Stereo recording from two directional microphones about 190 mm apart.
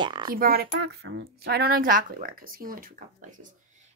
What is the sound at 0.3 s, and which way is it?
A woman's voice, 50° right (ahead or behind).